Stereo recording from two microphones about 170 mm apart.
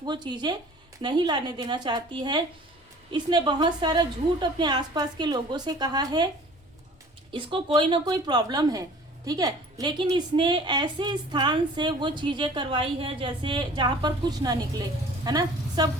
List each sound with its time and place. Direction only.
0.0 s speech: 25° right (ahead or behind)
7.3 s speech: 30° right (ahead or behind)